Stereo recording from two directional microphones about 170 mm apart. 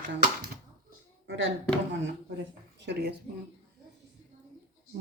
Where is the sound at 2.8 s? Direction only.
80° right.